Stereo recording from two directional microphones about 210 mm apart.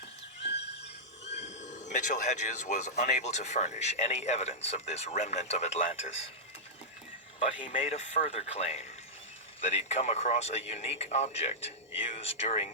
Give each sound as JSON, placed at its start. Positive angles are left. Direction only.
{"t": 0.5, "sound": "train", "side_deg": 55}
{"t": 1.6, "sound": "speech", "side_deg": 35}
{"t": 7.7, "sound": "speech", "side_deg": 30}